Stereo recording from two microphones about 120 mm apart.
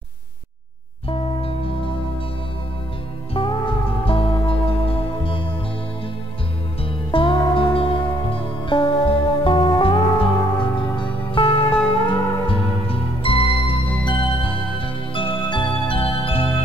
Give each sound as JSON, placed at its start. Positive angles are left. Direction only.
{"t": 1.0, "sound": "music", "side_deg": 50}
{"t": 3.4, "sound": "music", "side_deg": 50}
{"t": 7.1, "sound": "music", "side_deg": 45}